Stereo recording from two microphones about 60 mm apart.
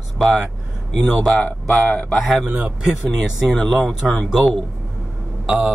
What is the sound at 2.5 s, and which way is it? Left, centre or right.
Speech, centre.